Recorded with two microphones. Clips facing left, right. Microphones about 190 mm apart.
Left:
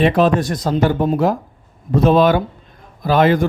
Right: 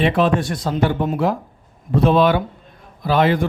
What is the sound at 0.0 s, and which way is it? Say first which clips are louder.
A man's voice: left 3 dB; 40° left (ahead or behind).